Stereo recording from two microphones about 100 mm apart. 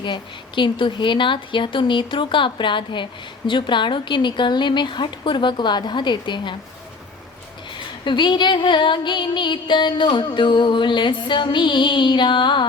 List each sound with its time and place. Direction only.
0.0 s a woman's voice: 50° left (ahead or behind)
8.0 s a woman's voice: 50° left (ahead or behind)